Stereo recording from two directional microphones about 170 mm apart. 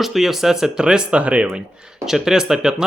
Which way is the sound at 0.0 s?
Centre (ahead or behind).